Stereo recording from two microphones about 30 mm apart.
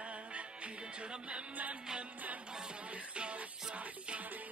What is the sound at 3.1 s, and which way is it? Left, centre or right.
Music, right.